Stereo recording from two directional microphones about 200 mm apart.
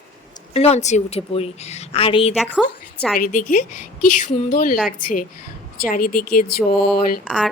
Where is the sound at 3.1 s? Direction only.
45° left (ahead or behind).